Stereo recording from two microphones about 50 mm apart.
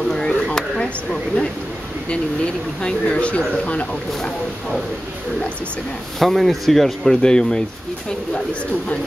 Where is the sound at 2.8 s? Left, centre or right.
Left.